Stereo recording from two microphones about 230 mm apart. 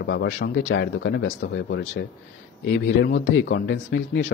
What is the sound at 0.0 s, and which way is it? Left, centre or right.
Speech, left.